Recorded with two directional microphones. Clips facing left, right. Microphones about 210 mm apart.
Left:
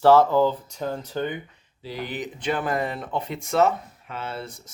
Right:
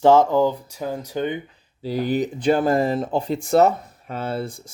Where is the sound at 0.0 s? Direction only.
15° right (ahead or behind).